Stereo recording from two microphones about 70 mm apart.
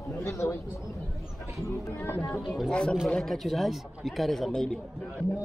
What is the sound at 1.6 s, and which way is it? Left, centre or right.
Speech, left.